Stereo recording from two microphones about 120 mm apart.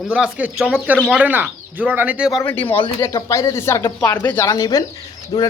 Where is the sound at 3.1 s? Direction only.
25° left (ahead or behind).